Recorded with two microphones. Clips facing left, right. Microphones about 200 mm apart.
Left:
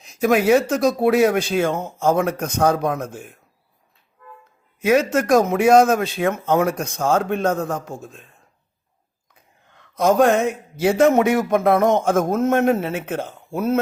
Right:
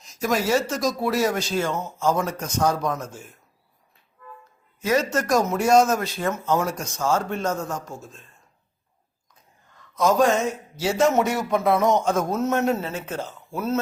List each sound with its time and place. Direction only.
0.0 s speech: 60° left (ahead or behind)
4.8 s speech: 60° left (ahead or behind)
9.3 s speech: 65° left (ahead or behind)